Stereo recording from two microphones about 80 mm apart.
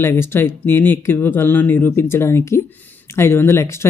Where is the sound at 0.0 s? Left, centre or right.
Left.